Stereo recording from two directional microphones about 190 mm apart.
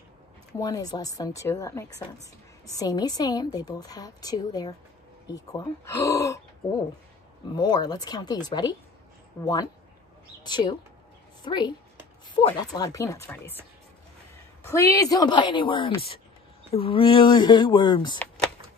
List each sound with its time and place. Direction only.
0.6 s a woman's voice: 20° left (ahead or behind)
14.6 s a woman's voice: 15° left (ahead or behind)